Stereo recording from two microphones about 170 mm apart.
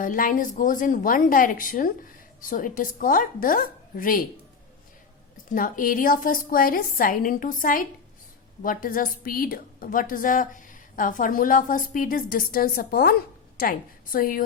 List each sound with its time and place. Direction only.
0.0 s a woman's voice: 50° left (ahead or behind)
5.5 s a woman's voice: 50° left (ahead or behind)